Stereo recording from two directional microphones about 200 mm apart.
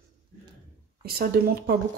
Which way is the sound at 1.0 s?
50° right (ahead or behind).